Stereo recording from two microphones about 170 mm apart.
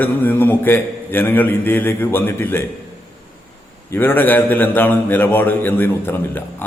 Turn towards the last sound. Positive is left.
turn(degrees=10)  # may be behind; listen again after turning